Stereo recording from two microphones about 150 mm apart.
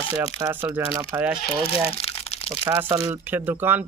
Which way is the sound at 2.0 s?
40° left (ahead or behind).